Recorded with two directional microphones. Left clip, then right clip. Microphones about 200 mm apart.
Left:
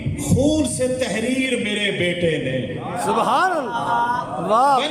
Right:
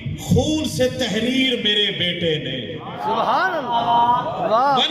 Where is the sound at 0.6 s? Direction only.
30° right (ahead or behind).